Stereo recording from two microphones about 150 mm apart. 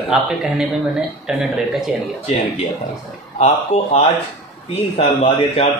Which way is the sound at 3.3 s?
45° left (ahead or behind).